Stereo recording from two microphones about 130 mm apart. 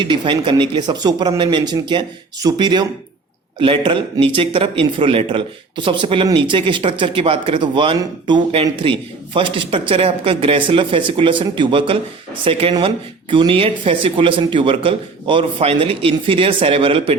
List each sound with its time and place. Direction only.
0.0 s a man's voice: 40° right (ahead or behind)